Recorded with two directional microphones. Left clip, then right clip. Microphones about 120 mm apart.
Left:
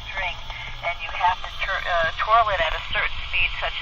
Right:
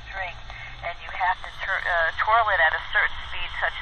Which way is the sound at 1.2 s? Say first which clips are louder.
Left 2 dB; 30° right (ahead or behind).